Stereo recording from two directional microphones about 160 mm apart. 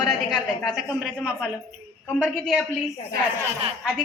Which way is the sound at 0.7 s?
5° right (ahead or behind).